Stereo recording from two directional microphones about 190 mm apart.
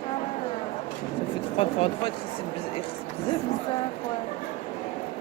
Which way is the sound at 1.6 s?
30° left (ahead or behind).